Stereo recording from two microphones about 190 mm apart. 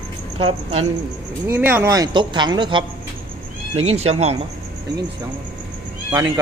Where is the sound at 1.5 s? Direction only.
10° right (ahead or behind); by 4.4 s 35° right (ahead or behind).